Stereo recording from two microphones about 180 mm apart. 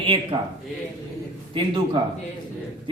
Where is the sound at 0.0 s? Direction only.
30° right (ahead or behind).